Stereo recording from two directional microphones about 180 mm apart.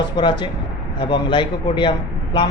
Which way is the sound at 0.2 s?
25° left (ahead or behind).